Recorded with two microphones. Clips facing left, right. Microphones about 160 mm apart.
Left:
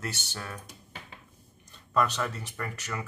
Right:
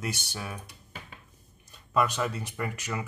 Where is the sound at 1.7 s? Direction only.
10° right (ahead or behind).